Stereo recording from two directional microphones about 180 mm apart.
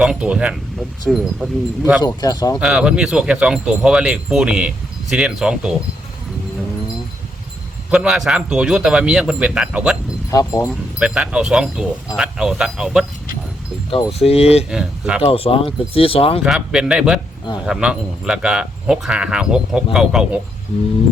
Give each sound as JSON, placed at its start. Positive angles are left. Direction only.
{"t": 0.0, "sound": "speech", "side_deg": -5}
{"t": 2.0, "sound": "speech", "side_deg": 20}
{"t": 2.6, "sound": "speech", "side_deg": -5}
{"t": 7.9, "sound": "speech", "side_deg": -5}
{"t": 10.3, "sound": "speech", "side_deg": 20}
{"t": 10.7, "sound": "speech", "side_deg": -5}
{"t": 13.9, "sound": "speech", "side_deg": 35}
{"t": 14.7, "sound": "speech", "side_deg": -5}
{"t": 15.2, "sound": "speech", "side_deg": 30}
{"t": 16.4, "sound": "speech", "side_deg": -5}